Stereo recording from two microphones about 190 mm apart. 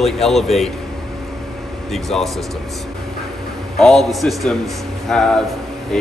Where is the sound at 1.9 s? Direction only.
Centre (ahead or behind).